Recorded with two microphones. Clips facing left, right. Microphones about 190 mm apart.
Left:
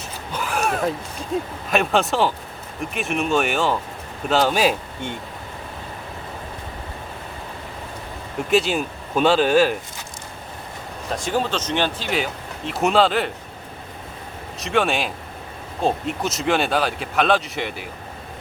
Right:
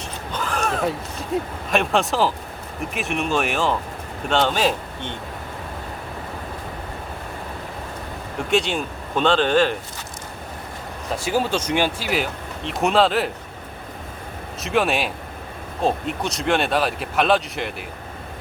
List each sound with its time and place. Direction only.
0.3 s a sound: 10° left (ahead or behind)
1.3 s speech: centre (ahead or behind)
8.4 s speech: centre (ahead or behind)
11.1 s speech: 5° right (ahead or behind)
14.6 s speech: centre (ahead or behind)